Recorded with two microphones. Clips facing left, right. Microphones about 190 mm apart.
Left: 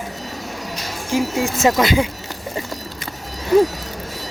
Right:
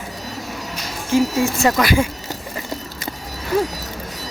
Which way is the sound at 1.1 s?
15° left (ahead or behind).